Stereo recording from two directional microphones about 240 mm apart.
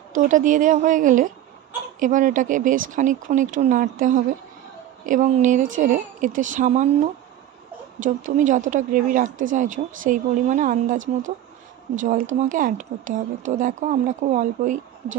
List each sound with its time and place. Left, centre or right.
0.1 s speech: right
8.0 s speech: right
12.0 s speech: right